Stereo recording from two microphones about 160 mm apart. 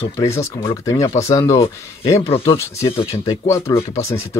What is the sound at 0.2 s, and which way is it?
Speech, 20° left (ahead or behind).